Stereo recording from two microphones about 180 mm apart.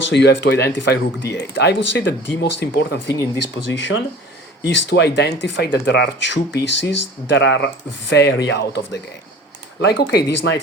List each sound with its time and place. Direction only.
0.1 s speech: 75° left (ahead or behind)
3.4 s speech: 85° left
4.6 s speech: 70° left (ahead or behind)
9.8 s speech: 65° left (ahead or behind)
10.3 s speech: 80° left